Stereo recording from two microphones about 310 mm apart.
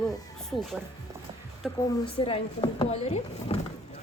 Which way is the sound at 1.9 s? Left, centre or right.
Centre.